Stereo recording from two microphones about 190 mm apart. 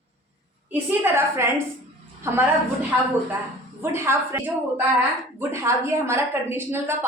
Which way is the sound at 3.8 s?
10° right (ahead or behind).